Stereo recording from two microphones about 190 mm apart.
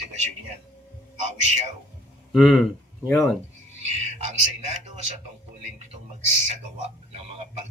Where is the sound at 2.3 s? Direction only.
Centre (ahead or behind).